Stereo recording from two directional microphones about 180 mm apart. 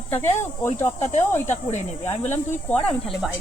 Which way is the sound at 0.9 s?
40° left (ahead or behind).